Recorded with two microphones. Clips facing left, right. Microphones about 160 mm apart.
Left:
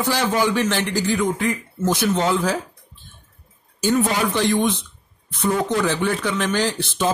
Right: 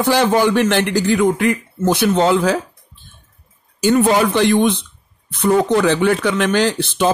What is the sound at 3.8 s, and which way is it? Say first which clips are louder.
Speech: right 6 dB; 65° right (ahead or behind).